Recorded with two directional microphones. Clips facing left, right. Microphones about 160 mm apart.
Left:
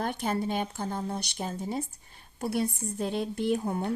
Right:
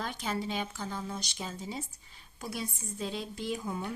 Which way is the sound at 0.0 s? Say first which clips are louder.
Left 5 dB; 55° left (ahead or behind).